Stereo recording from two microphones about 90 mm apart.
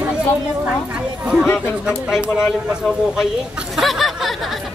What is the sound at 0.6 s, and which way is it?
Speech, 15° right (ahead or behind).